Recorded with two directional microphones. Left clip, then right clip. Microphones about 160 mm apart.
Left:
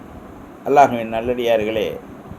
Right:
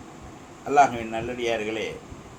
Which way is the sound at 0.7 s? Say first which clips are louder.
Left 6 dB; 65° left (ahead or behind).